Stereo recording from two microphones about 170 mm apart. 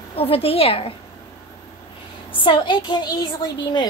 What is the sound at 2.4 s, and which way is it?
A woman's voice, 30° left (ahead or behind).